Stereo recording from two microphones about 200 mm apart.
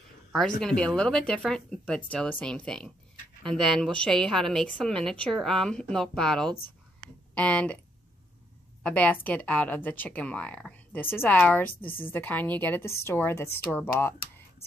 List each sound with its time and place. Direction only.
0.6 s a woman's voice: 5° left (ahead or behind)
8.8 s speech: 5° left (ahead or behind)